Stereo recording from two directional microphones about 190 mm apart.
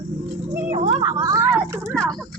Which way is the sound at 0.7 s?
35° right (ahead or behind).